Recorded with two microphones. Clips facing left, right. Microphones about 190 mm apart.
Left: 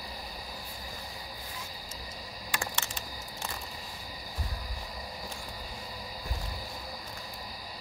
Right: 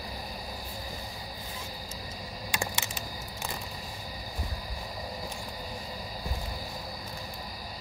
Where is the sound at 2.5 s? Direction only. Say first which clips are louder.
Right 1 dB; 15° right (ahead or behind).